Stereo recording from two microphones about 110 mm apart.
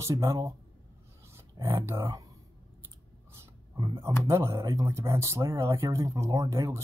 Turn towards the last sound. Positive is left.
turn(degrees=-30)  # may be behind; listen again after turning